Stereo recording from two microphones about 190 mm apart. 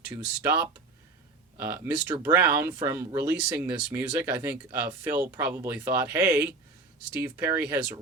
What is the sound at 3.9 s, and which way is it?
Speech, 10° right (ahead or behind).